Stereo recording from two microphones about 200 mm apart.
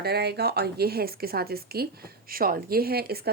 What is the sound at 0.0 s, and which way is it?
Speech, 55° right (ahead or behind).